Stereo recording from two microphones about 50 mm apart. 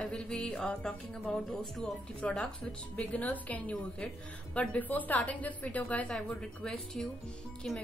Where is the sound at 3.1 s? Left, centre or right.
Left.